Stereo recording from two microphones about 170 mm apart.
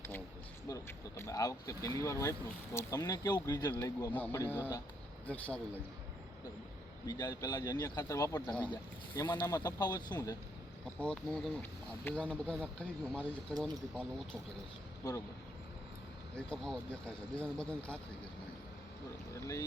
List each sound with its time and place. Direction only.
0.7 s speech: 15° left (ahead or behind)
7.0 s speech: 20° left (ahead or behind)
11.0 s speech: 5° left (ahead or behind)
16.3 s speech: 5° left (ahead or behind)
19.3 s speech: 20° left (ahead or behind)